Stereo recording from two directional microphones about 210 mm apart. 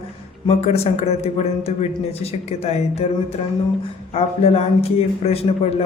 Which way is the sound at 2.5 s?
30° left (ahead or behind).